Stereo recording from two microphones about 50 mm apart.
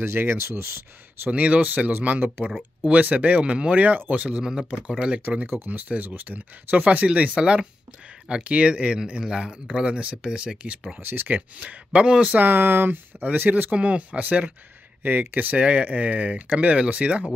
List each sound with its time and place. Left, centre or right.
0.1 s speech: right
1.3 s speech: right
4.4 s speech: centre
4.8 s speech: right
5.5 s speech: right
11.0 s speech: right
11.2 s speech: right
12.4 s speech: right
15.0 s speech: right
15.5 s speech: right